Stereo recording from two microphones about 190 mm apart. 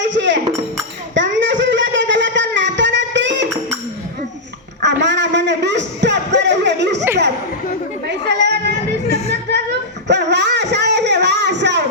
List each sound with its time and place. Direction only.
0.0 s music: 70° right (ahead or behind)
1.1 s a sound: 70° right (ahead or behind)
4.8 s music: 65° right (ahead or behind)
8.3 s chatter: 65° right (ahead or behind)
9.0 s music: 35° left (ahead or behind)
10.1 s a sound: 65° right (ahead or behind)